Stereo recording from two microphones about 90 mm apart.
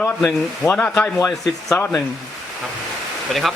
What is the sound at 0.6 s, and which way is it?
Speech, 30° left (ahead or behind).